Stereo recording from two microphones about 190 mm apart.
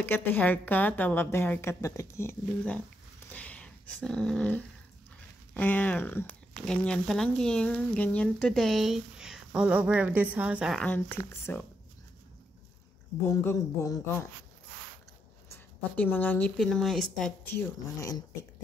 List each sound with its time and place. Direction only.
0.0 s a woman's voice: 10° left (ahead or behind)
3.3 s dog: 5° left (ahead or behind)
5.5 s speech: 10° left (ahead or behind)
13.2 s a woman's voice: 15° left (ahead or behind)
15.5 s speech: 10° left (ahead or behind)
17.6 s a woman's voice: 15° left (ahead or behind)